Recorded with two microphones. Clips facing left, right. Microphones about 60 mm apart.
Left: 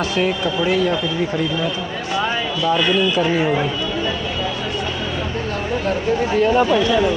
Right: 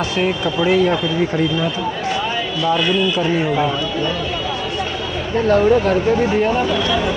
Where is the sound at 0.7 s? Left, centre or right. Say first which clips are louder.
Right 4 dB; right.